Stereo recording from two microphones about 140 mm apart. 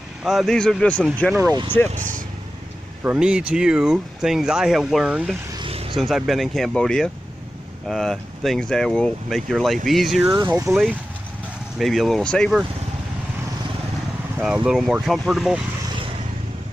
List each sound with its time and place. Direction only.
0.2 s speech: centre (ahead or behind)
3.0 s speech: 10° right (ahead or behind)
5.7 s vehicle: 45° right (ahead or behind)
5.9 s speech: centre (ahead or behind)
14.4 s speech: 5° right (ahead or behind)